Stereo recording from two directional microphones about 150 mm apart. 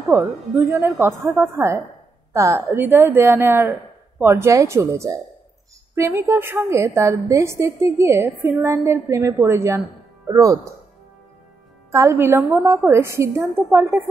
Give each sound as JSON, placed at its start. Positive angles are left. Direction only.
{"t": 0.1, "sound": "a woman's voice", "side_deg": -15}
{"t": 11.9, "sound": "a woman's voice", "side_deg": -20}